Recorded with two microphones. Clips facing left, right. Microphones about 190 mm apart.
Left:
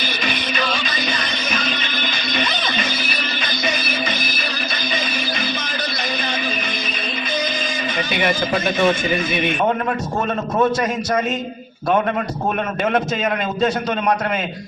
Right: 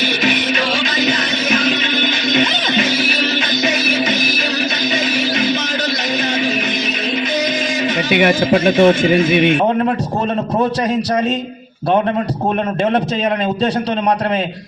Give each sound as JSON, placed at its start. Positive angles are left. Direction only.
{"t": 8.1, "sound": "a man's voice", "side_deg": -60}